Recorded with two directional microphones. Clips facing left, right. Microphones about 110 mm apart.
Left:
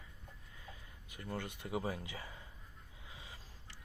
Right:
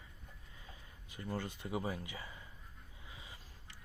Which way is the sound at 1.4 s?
15° left (ahead or behind).